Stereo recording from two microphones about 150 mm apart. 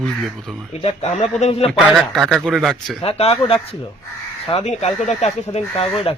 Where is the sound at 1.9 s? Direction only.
Centre (ahead or behind).